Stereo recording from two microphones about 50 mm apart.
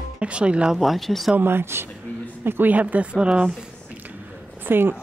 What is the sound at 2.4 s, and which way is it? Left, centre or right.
Speech, right.